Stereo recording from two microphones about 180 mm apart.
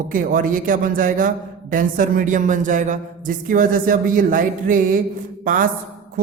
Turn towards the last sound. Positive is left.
turn(degrees=-50)  # may be behind; listen again after turning